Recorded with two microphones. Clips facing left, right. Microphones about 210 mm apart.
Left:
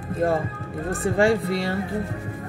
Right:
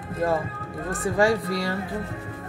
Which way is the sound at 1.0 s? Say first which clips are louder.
Left 2 dB; 30° left (ahead or behind).